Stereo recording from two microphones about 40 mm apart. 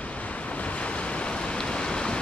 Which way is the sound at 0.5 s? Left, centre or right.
Left.